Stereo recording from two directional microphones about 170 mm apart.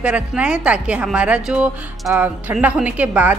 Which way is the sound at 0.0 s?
5° right (ahead or behind).